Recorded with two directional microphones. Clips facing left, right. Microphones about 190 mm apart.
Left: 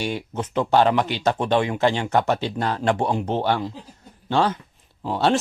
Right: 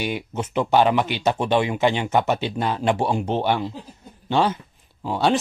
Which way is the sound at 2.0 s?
5° right (ahead or behind).